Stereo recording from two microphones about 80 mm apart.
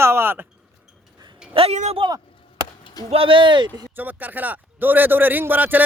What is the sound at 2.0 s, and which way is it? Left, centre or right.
Speech, right.